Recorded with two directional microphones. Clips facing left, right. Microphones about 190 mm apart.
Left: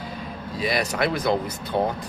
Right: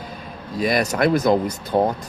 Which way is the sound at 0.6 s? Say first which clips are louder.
Right 5 dB; 45° right (ahead or behind).